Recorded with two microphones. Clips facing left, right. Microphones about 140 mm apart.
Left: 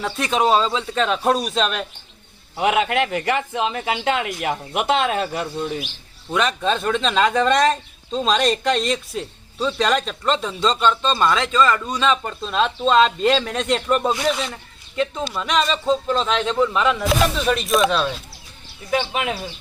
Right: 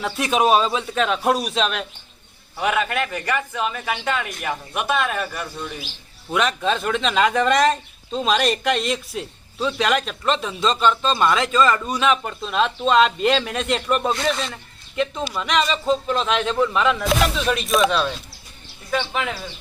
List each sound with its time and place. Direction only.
0.0 s speech: 10° right (ahead or behind)
2.6 s a man's voice: 20° left (ahead or behind)
6.3 s speech: centre (ahead or behind)
18.9 s speech: 15° left (ahead or behind)